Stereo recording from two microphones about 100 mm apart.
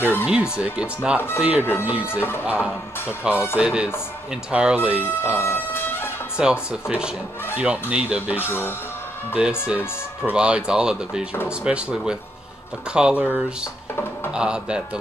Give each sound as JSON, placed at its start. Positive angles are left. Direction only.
{"t": 0.0, "sound": "speech", "side_deg": 20}
{"t": 0.3, "sound": "speech", "side_deg": -10}
{"t": 1.6, "sound": "speech", "side_deg": 20}
{"t": 2.6, "sound": "speech", "side_deg": -10}
{"t": 5.0, "sound": "speech", "side_deg": 20}
{"t": 6.4, "sound": "speech", "side_deg": -5}
{"t": 8.5, "sound": "speech", "side_deg": 20}
{"t": 9.3, "sound": "speech", "side_deg": -10}
{"t": 14.3, "sound": "speech", "side_deg": -10}